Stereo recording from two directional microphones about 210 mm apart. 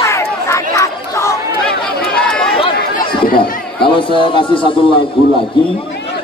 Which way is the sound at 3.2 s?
45° left (ahead or behind).